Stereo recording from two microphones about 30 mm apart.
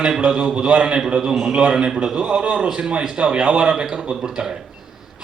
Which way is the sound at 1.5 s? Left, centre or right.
Right.